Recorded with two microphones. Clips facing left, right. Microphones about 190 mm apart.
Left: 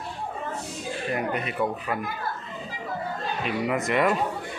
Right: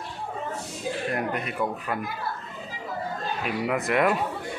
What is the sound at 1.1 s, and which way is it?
Speech, centre (ahead or behind).